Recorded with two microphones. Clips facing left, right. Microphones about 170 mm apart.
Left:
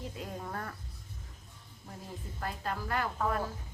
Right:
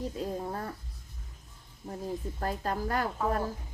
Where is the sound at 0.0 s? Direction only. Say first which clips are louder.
Right 7 dB; 30° right (ahead or behind).